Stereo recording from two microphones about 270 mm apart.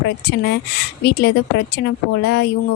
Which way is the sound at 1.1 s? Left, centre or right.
Left.